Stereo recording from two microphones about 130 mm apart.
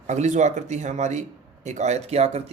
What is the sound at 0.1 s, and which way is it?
Speech, 65° right (ahead or behind).